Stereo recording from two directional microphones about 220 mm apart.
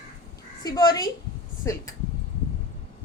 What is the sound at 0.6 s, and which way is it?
A woman's voice, 15° left (ahead or behind).